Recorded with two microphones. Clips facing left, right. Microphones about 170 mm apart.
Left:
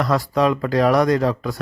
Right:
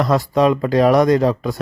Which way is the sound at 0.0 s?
20° right (ahead or behind).